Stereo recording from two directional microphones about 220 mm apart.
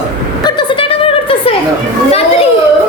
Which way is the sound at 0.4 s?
25° left (ahead or behind).